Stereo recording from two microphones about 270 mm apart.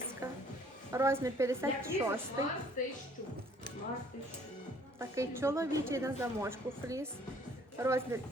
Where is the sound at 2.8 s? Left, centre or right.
Left.